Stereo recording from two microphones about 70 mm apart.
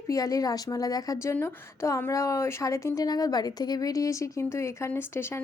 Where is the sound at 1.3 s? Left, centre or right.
Left.